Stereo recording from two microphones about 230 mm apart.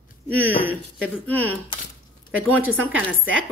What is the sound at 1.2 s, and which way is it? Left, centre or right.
Speech, centre.